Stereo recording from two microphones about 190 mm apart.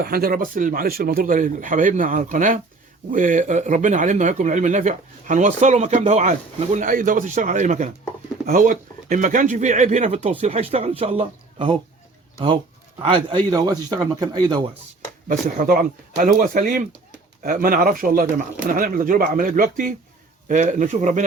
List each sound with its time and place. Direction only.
0.0 s speech: 50° right (ahead or behind); by 11.8 s 30° right (ahead or behind)
13.0 s speech: 25° right (ahead or behind)
15.3 s speech: 45° right (ahead or behind)